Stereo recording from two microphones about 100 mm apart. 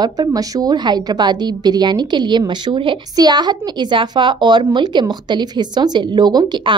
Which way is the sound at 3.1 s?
45° right (ahead or behind).